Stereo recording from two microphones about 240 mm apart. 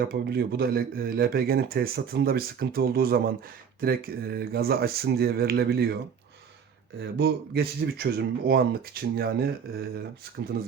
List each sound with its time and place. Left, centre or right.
0.0 s speech: right
7.0 s speech: right
10.5 s speech: right